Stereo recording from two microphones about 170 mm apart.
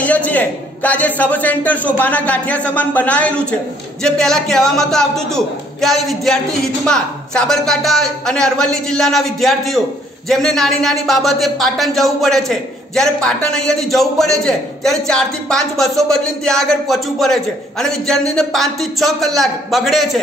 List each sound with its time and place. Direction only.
0.0 s a man's voice: 10° left (ahead or behind)